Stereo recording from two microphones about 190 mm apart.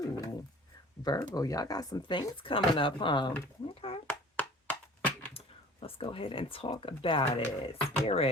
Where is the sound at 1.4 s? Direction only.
20° left (ahead or behind).